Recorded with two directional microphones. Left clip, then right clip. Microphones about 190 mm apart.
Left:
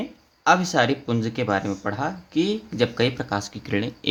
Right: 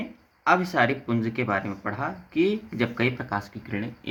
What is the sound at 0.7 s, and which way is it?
Speech, 50° left (ahead or behind).